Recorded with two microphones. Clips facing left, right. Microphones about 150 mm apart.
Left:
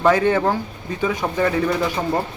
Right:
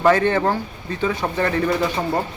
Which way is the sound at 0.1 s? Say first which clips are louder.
Left 1 dB; 10° left (ahead or behind).